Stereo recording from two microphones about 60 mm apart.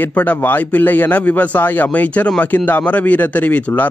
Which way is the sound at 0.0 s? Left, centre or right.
Left.